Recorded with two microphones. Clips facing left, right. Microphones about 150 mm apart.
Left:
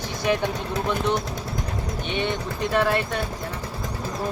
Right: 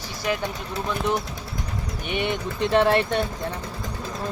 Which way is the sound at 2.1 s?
15° right (ahead or behind).